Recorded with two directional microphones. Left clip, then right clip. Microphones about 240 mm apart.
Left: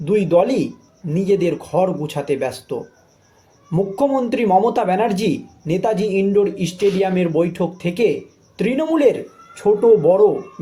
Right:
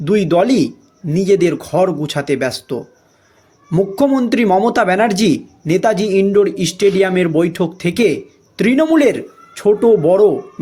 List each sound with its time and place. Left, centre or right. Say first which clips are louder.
0.0 s a man's voice: right 2 dB; right